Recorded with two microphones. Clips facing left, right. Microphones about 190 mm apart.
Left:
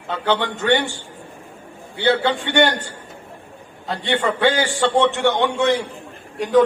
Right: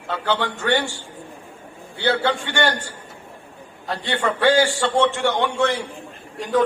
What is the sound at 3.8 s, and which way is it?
A man's voice, 20° left (ahead or behind).